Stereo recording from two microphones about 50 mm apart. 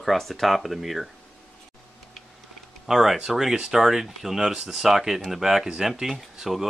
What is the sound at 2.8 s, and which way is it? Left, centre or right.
Speech, centre.